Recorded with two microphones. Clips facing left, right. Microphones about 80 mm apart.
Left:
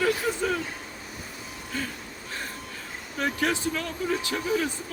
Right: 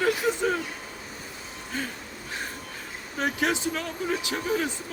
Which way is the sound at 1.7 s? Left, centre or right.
Right.